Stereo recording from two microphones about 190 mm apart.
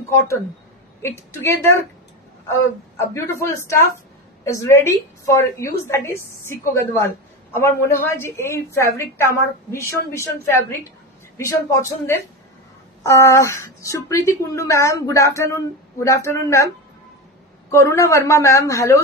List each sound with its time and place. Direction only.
1.0 s speech: 15° left (ahead or behind)
3.2 s speech: 15° left (ahead or behind)
17.6 s speech: 15° left (ahead or behind)